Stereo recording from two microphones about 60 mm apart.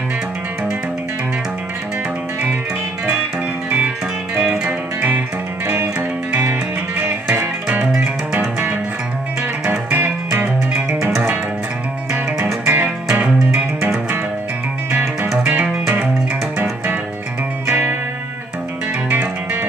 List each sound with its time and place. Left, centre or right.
4.6 s music: right
10.7 s music: centre
12.6 s music: right